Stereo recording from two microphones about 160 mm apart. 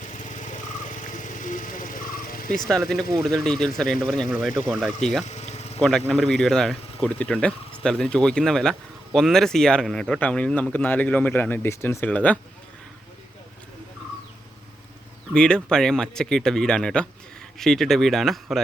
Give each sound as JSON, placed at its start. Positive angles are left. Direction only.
{"t": 0.3, "sound": "vehicle", "side_deg": 50}
{"t": 2.6, "sound": "speech", "side_deg": 0}
{"t": 5.2, "sound": "speech", "side_deg": 45}
{"t": 6.1, "sound": "speech", "side_deg": 5}
{"t": 15.3, "sound": "speech", "side_deg": 5}